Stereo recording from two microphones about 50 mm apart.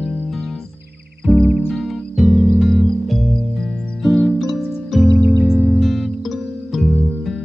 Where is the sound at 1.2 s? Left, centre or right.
Centre.